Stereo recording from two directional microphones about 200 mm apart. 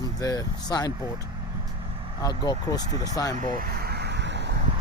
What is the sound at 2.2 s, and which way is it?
Speech, 20° left (ahead or behind).